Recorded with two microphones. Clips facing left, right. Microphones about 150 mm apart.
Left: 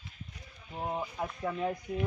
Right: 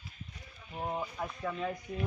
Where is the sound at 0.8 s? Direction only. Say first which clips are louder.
Left 1 dB; 10° left (ahead or behind).